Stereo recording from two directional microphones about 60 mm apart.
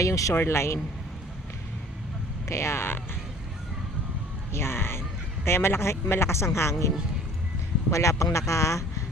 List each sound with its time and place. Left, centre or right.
0.0 s a man's voice: left
0.3 s speech: left
2.5 s speech: left
4.5 s a sound: left
5.5 s a man's voice: left